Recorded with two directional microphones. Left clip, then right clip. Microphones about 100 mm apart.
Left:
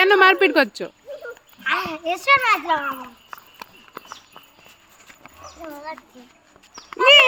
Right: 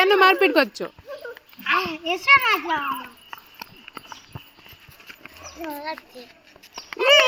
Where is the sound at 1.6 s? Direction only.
40° left (ahead or behind).